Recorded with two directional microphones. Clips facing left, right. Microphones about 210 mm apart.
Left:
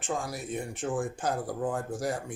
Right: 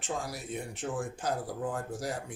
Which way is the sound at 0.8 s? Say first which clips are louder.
Left 5 dB; 50° left (ahead or behind).